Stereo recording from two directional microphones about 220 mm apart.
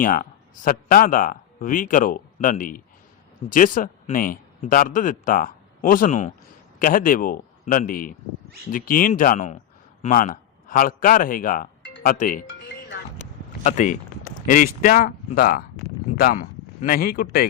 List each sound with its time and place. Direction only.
0.0 s a man's voice: 40° left (ahead or behind)
12.5 s music: 50° left (ahead or behind)
13.7 s speech: 35° left (ahead or behind)